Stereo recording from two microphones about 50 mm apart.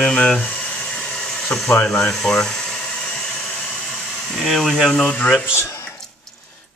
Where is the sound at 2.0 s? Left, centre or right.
Centre.